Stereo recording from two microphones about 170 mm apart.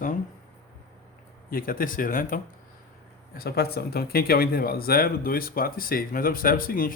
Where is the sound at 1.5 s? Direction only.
55° left (ahead or behind).